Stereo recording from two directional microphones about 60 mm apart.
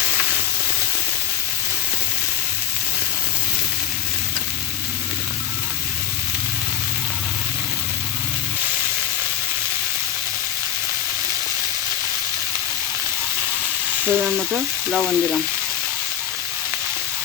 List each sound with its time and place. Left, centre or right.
14.0 s frying: right
14.8 s frying: centre